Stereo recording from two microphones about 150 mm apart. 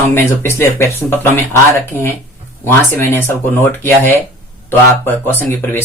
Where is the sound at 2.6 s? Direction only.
15° left (ahead or behind).